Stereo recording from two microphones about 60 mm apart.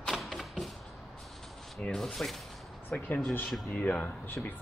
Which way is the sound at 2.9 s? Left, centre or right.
Left.